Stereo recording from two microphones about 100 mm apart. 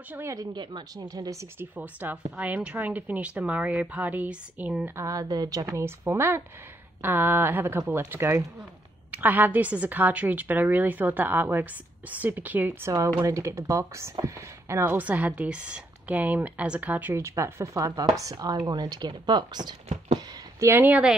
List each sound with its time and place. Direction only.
0.1 s speech: 30° right (ahead or behind)
0.6 s speech: 45° right (ahead or behind)
1.6 s speech: 15° right (ahead or behind); by 5.7 s 40° right (ahead or behind)
5.7 s speech: 25° right (ahead or behind)
13.3 s speech: 30° right (ahead or behind); by 17.1 s 15° right (ahead or behind)
17.1 s speech: 25° right (ahead or behind); by 19.7 s 45° right (ahead or behind)
20.5 s speech: 25° right (ahead or behind)